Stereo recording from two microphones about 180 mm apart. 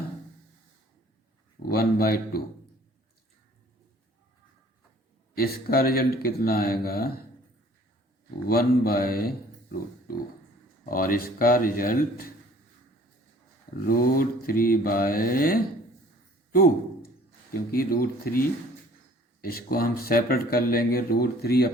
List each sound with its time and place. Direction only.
1.7 s speech: 55° left (ahead or behind)
5.3 s speech: 55° left (ahead or behind)
8.4 s speech: 55° left (ahead or behind)
10.8 s mantra: 50° left (ahead or behind)
13.8 s mantra: 55° left (ahead or behind)
16.5 s a sound: 55° left (ahead or behind)
17.5 s speech: 55° left (ahead or behind)